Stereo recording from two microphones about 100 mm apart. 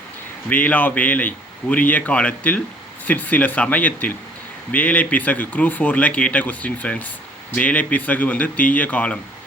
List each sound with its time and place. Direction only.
0.5 s speech: 15° left (ahead or behind)